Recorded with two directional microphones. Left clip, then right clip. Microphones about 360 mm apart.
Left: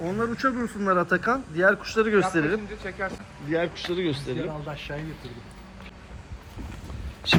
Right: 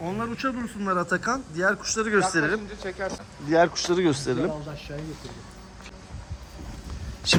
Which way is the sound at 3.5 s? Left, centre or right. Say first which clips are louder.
Right 6 dB; centre.